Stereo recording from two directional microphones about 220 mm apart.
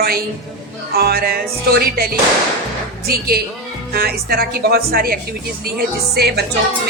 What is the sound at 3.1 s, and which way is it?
Speech, 45° right (ahead or behind).